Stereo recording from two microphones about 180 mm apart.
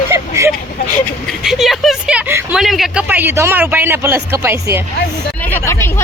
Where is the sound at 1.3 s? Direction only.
Centre (ahead or behind).